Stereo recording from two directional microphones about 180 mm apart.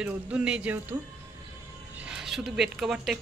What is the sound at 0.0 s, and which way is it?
Speech, 5° right (ahead or behind).